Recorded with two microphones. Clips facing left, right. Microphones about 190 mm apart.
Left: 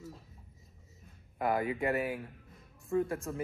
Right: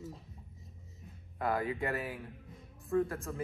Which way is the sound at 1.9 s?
Centre (ahead or behind).